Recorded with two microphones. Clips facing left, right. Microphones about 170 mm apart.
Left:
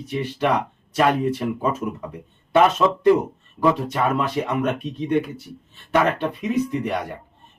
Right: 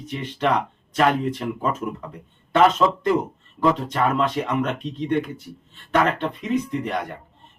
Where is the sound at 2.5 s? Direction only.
10° left (ahead or behind).